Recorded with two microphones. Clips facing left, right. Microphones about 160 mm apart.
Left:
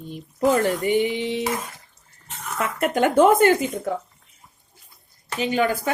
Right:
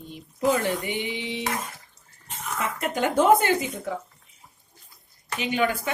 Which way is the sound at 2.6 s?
55° left (ahead or behind).